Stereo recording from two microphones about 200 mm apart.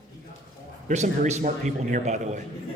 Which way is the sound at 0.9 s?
40° right (ahead or behind).